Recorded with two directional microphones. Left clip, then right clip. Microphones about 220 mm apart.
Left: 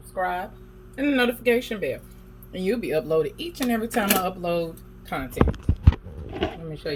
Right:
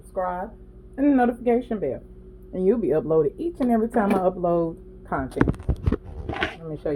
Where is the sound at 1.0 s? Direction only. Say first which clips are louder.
Right 2 dB; 20° right (ahead or behind).